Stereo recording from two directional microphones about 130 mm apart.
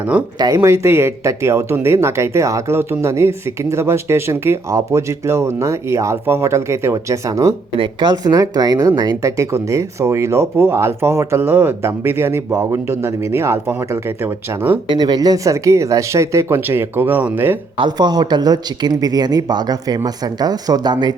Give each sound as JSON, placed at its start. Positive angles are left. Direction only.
{"t": 0.3, "sound": "speech", "side_deg": -25}
{"t": 7.8, "sound": "speech", "side_deg": -35}
{"t": 14.8, "sound": "speech", "side_deg": -30}
{"t": 17.7, "sound": "speech", "side_deg": -35}